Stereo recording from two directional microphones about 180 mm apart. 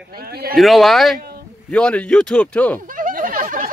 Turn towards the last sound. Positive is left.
turn(degrees=-50)  # may be behind; listen again after turning